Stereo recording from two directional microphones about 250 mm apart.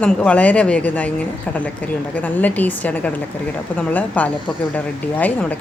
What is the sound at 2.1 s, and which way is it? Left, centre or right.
Speech, centre.